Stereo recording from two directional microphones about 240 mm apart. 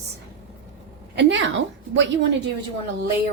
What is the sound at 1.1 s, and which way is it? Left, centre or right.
Speech, right.